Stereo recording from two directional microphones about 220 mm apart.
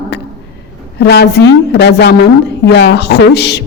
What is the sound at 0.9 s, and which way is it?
A woman's voice, 50° left (ahead or behind).